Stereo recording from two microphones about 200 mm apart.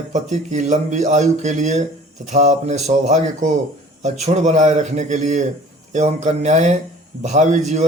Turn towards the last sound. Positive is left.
turn(degrees=-35)  # may be behind; listen again after turning